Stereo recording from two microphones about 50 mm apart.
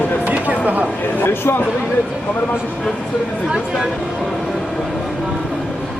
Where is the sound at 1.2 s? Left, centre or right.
Left.